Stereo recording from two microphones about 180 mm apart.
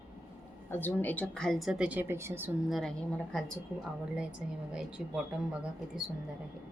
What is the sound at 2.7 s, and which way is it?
Speech, 5° left (ahead or behind).